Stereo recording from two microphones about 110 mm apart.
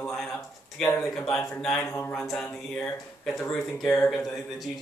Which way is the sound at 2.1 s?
5° left (ahead or behind).